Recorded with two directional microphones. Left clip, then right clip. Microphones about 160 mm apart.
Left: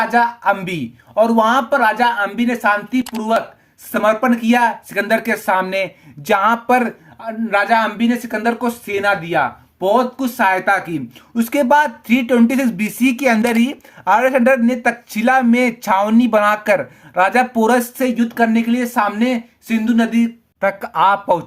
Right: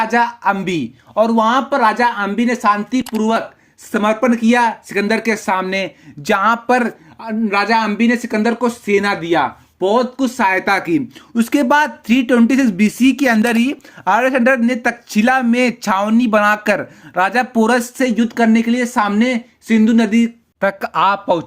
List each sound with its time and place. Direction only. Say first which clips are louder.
0.1 s speech: even; 35° right (ahead or behind)
3.0 s speech: right 3 dB; centre (ahead or behind)
3.9 s speech: even; 35° right (ahead or behind); by 21.4 s 20° right (ahead or behind)